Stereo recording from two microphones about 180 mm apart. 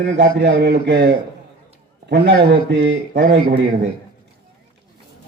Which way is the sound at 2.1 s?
75° right (ahead or behind).